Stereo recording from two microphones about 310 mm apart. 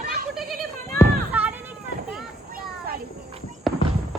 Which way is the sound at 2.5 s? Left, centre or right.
Right.